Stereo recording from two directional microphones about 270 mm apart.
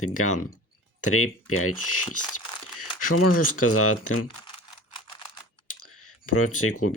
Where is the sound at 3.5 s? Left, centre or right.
Left.